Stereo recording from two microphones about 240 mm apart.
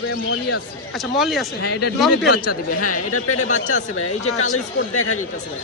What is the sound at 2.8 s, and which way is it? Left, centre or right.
Speech, left.